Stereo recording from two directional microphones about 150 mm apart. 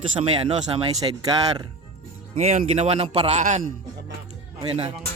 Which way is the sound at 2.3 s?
50° right (ahead or behind).